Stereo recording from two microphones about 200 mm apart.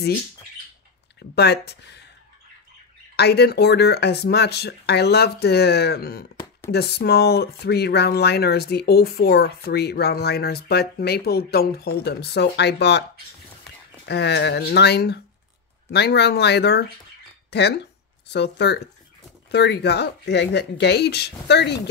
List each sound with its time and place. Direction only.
1.3 s speech: 55° left (ahead or behind)
3.2 s speech: 55° left (ahead or behind)
14.0 s speech: 60° left (ahead or behind)